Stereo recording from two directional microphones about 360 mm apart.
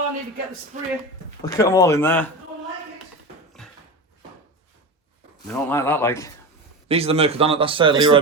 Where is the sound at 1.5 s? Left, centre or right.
Centre.